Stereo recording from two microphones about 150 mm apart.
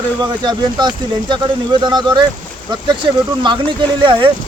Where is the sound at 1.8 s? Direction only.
30° right (ahead or behind).